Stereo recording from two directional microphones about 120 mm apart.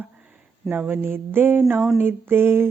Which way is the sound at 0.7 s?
15° right (ahead or behind).